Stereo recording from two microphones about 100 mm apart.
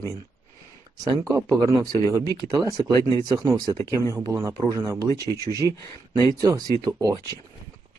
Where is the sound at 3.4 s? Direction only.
45° right (ahead or behind).